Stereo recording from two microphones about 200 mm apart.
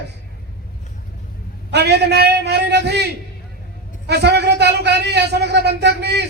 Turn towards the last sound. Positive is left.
turn(degrees=-55)  # may be behind; listen again after turning